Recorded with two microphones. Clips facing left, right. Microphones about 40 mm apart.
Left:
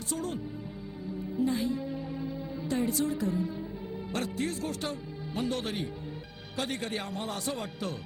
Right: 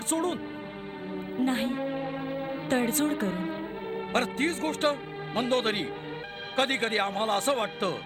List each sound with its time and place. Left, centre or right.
0.1 s a man's voice: right